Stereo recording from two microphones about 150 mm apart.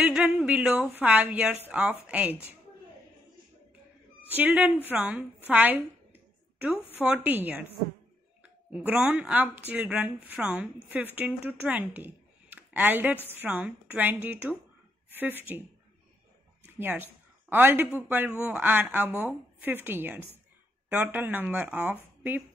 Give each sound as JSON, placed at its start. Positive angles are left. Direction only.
{"t": 0.0, "sound": "a woman's voice", "side_deg": -5}
{"t": 4.3, "sound": "a woman's voice", "side_deg": -10}
{"t": 8.7, "sound": "a woman's voice", "side_deg": -10}
{"t": 16.7, "sound": "speech", "side_deg": -15}